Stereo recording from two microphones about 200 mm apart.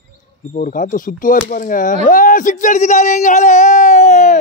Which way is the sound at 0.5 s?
40° left (ahead or behind).